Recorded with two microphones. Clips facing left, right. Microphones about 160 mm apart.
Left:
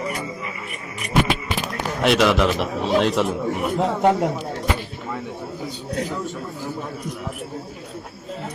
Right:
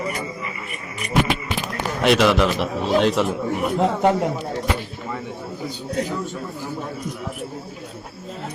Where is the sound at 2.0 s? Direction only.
Centre (ahead or behind).